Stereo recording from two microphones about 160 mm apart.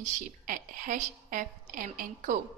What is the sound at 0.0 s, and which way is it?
A woman's voice, 55° right (ahead or behind).